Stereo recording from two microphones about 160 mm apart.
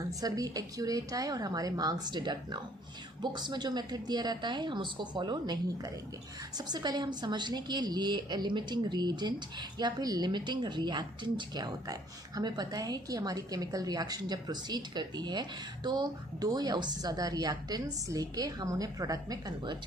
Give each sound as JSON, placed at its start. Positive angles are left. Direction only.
{"t": 0.2, "sound": "a woman's voice", "side_deg": -25}